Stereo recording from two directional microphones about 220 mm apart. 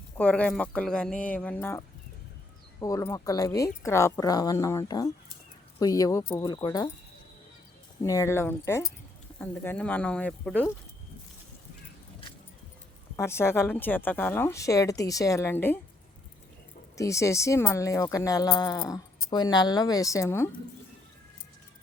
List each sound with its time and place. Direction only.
0.2 s speech: 5° left (ahead or behind)
2.8 s speech: 15° left (ahead or behind)
8.0 s speech: 15° left (ahead or behind)
13.1 s speech: 10° left (ahead or behind)
17.0 s speech: 15° left (ahead or behind)